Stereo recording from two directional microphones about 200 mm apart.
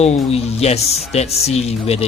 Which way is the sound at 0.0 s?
30° left (ahead or behind).